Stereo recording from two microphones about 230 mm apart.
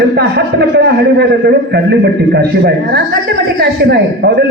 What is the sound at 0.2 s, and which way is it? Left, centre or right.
A man's voice, right.